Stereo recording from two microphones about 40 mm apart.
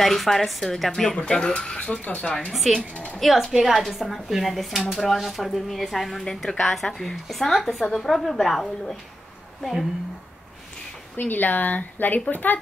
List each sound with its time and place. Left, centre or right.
0.0 s speech: centre
1.2 s speech: left
2.0 s speech: left
2.5 s speech: centre
2.9 s a sound: left
3.2 s speech: centre
6.2 s a woman's voice: centre
11.1 s speech: left